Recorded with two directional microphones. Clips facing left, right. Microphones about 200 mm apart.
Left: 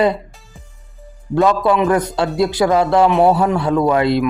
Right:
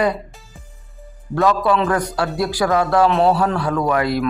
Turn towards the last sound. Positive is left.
turn(degrees=25)  # may be behind; listen again after turning